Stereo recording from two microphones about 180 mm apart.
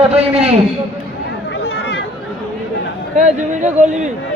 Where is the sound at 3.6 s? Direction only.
40° right (ahead or behind).